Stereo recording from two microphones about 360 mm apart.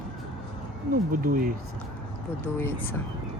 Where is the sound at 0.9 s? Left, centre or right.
Right.